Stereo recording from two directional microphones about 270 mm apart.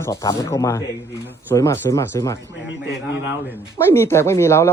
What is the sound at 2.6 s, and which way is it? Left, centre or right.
Speech, left.